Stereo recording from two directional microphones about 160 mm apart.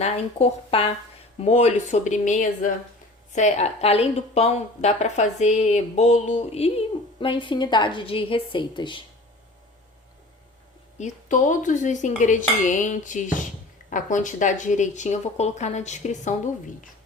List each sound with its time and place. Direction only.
0.0 s a woman's voice: 40° left (ahead or behind)
1.4 s dishes: 45° left (ahead or behind)
3.3 s a woman's voice: 45° left (ahead or behind); by 9.0 s 30° left (ahead or behind)
10.9 s dishes: 50° left (ahead or behind)